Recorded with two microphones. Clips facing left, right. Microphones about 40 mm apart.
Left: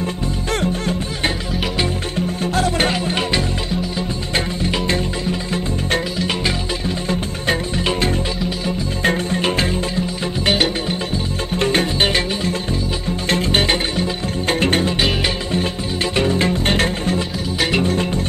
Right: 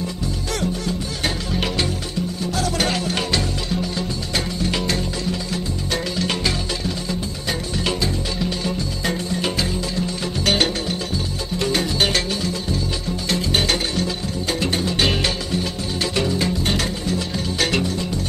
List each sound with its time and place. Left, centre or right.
0.5 s music: left
2.9 s music: left
4.6 s music: left
6.1 s music: centre
9.0 s music: left
10.4 s music: centre
11.5 s music: left
13.3 s music: left
16.2 s music: left
17.6 s music: centre
17.8 s music: left